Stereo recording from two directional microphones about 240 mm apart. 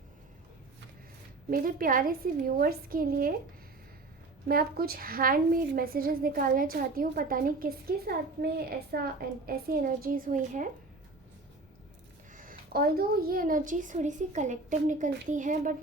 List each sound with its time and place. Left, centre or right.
1.5 s a woman's voice: right
4.4 s a woman's voice: right
12.4 s a woman's voice: right